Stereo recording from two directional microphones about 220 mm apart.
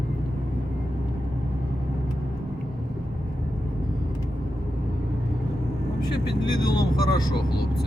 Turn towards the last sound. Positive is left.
turn(degrees=20)  # may be behind; listen again after turning